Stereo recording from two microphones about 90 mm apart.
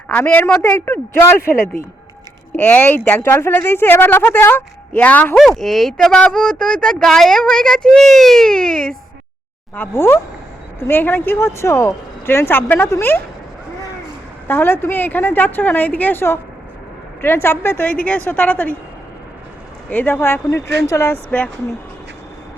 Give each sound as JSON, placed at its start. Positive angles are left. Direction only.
{"t": 0.1, "sound": "speech", "side_deg": 20}
{"t": 5.4, "sound": "speech", "side_deg": 0}
{"t": 9.9, "sound": "speech", "side_deg": 30}
{"t": 14.4, "sound": "speech", "side_deg": 25}
{"t": 19.9, "sound": "speech", "side_deg": 20}
{"t": 21.2, "sound": "speech", "side_deg": 15}